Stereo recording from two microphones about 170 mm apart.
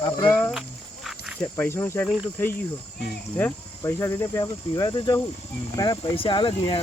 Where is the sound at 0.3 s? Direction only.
10° left (ahead or behind).